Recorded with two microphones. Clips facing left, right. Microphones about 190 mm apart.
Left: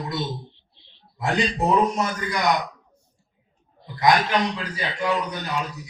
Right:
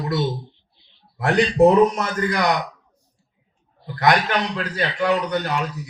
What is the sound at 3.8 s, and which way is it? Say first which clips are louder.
A man's voice: right 1 dB; 75° right (ahead or behind).